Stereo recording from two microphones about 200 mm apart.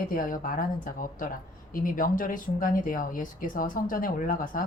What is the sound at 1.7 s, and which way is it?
Speech, 45° left (ahead or behind).